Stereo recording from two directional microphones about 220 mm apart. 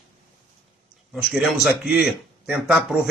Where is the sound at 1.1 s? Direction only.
5° right (ahead or behind).